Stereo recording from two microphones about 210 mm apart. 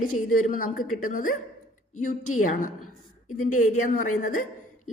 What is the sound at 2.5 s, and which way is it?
A woman's voice, 40° left (ahead or behind).